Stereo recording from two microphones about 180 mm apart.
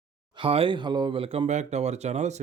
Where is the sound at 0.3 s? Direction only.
30° right (ahead or behind).